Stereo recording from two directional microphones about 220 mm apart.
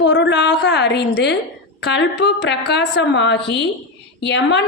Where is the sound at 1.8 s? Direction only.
50° left (ahead or behind).